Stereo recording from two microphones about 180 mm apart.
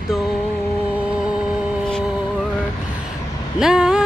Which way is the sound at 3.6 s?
5° right (ahead or behind).